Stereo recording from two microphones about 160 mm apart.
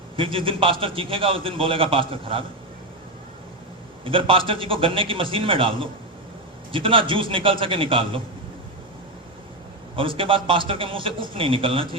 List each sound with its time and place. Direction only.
0.2 s a man's voice: 35° right (ahead or behind)
4.0 s a man's voice: 35° right (ahead or behind)
9.9 s a man's voice: 35° right (ahead or behind)